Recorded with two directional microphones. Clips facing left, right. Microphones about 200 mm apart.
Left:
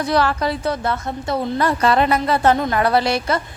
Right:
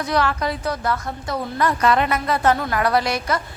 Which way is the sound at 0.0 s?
30° left (ahead or behind).